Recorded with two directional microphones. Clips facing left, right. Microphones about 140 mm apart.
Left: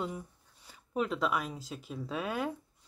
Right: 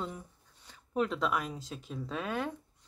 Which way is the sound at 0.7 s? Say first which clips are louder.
Right 1 dB; 5° left (ahead or behind).